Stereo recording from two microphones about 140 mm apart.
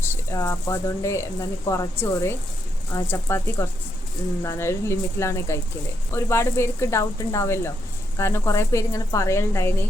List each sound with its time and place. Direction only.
0.1 s speech: 20° left (ahead or behind)